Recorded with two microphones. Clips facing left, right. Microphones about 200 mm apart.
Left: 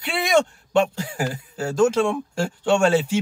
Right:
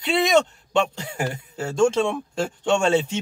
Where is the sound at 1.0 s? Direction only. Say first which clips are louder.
Left 1 dB; 25° right (ahead or behind).